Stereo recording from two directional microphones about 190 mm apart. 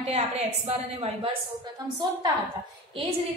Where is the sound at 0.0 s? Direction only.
35° right (ahead or behind).